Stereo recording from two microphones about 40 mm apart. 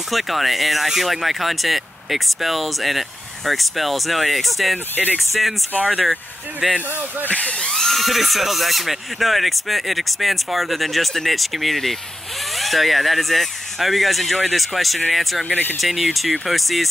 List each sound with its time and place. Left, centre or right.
0.1 s speech: centre
6.6 s speech: centre
7.2 s speech: left
7.7 s speech: centre
15.5 s speech: left
15.8 s speech: centre